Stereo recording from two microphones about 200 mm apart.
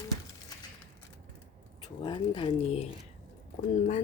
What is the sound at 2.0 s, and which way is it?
Speech, 25° left (ahead or behind).